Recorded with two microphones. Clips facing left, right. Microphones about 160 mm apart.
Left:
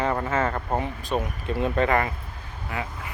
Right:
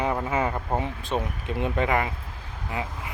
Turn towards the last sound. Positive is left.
turn(degrees=-20)  # may be behind; listen again after turning